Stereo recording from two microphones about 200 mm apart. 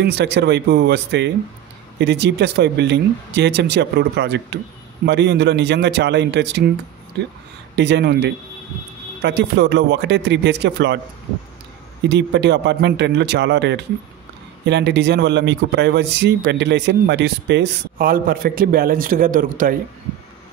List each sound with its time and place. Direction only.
0.0 s a man's voice: 60° right (ahead or behind)
7.7 s a man's voice: 60° right (ahead or behind)
12.0 s a man's voice: 60° right (ahead or behind); by 19.8 s 40° right (ahead or behind)